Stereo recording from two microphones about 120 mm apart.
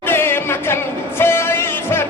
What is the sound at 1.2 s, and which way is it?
Music, 20° left (ahead or behind).